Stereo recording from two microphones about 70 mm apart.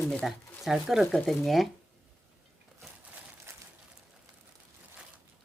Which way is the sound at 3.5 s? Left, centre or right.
Right.